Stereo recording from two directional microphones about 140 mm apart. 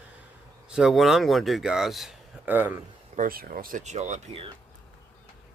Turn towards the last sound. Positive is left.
turn(degrees=-55)  # may be behind; listen again after turning